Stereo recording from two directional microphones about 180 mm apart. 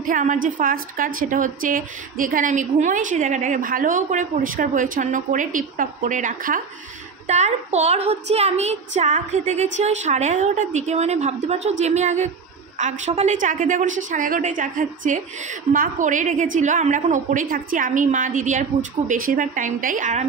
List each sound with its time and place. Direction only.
0.0 s a woman's voice: 45° right (ahead or behind)